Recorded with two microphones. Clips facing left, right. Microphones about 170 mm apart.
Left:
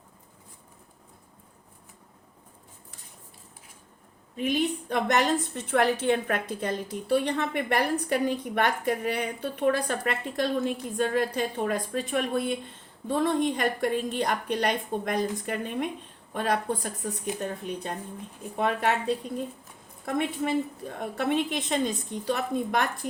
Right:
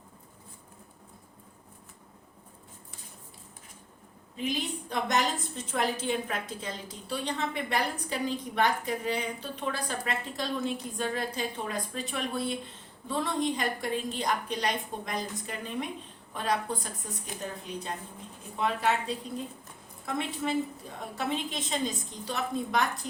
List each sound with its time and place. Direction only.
4.4 s a woman's voice: 55° left (ahead or behind)
18.5 s a woman's voice: 55° left (ahead or behind)
20.1 s a woman's voice: 55° left (ahead or behind)